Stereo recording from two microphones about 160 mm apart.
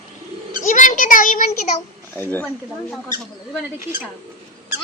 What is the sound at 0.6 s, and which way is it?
A child's voice, 55° left (ahead or behind).